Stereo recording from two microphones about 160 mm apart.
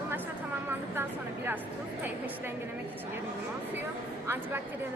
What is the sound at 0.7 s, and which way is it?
Speech, 15° right (ahead or behind).